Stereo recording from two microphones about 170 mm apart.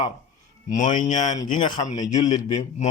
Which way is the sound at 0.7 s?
45° left (ahead or behind).